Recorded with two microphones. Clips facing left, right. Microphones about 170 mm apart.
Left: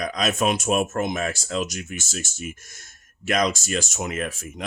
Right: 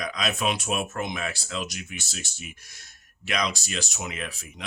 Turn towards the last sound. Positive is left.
turn(degrees=45)  # may be behind; listen again after turning